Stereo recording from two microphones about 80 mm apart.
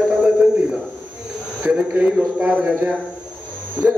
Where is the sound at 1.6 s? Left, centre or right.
Centre.